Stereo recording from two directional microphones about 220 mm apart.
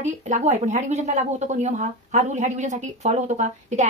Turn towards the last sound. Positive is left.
turn(degrees=-30)  # may be behind; listen again after turning